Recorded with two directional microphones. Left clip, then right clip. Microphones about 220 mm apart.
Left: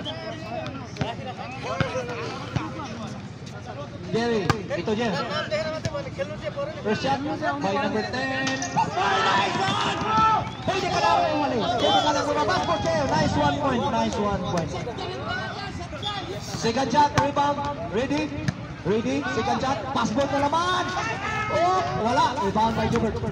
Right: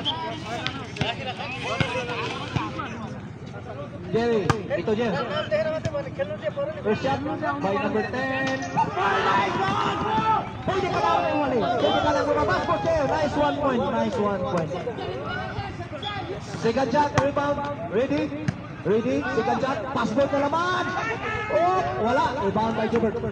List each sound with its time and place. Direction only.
4.1 s speech: 55° left (ahead or behind)
8.3 s a man's voice: 55° left (ahead or behind)
16.6 s a man's voice: 55° left (ahead or behind)
19.6 s hubbub: 50° left (ahead or behind)